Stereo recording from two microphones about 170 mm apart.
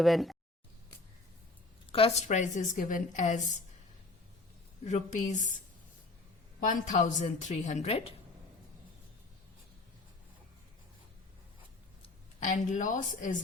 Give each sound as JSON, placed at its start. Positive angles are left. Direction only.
{"t": 0.0, "sound": "speech", "side_deg": 0}
{"t": 1.9, "sound": "a woman's voice", "side_deg": 35}
{"t": 2.2, "sound": "a woman's voice", "side_deg": 45}
{"t": 4.8, "sound": "a woman's voice", "side_deg": 45}
{"t": 6.7, "sound": "a woman's voice", "side_deg": 50}
{"t": 12.7, "sound": "a woman's voice", "side_deg": 50}